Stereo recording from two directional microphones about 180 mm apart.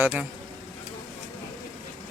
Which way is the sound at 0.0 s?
10° right (ahead or behind).